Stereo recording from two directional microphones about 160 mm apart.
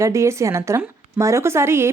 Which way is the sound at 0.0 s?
20° right (ahead or behind).